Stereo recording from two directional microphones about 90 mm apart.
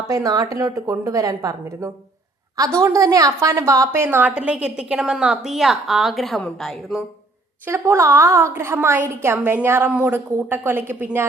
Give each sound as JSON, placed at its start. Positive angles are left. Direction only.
{"t": 0.1, "sound": "a woman's voice", "side_deg": -45}
{"t": 4.4, "sound": "a woman's voice", "side_deg": -10}
{"t": 7.7, "sound": "a woman's voice", "side_deg": -30}